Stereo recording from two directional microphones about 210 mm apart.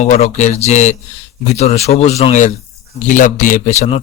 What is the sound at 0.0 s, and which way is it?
A man's voice, 35° left (ahead or behind).